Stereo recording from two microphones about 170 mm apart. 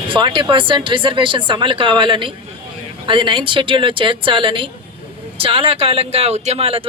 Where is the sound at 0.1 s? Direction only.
30° right (ahead or behind).